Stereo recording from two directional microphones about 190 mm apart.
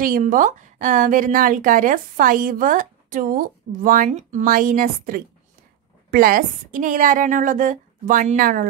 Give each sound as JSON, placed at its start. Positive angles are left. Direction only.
{"t": 0.0, "sound": "a woman's voice", "side_deg": -45}